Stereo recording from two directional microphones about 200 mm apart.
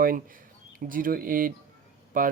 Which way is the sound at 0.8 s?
45° right (ahead or behind).